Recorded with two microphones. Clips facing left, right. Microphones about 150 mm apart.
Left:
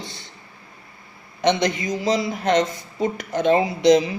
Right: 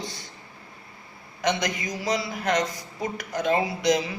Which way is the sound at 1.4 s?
25° left (ahead or behind).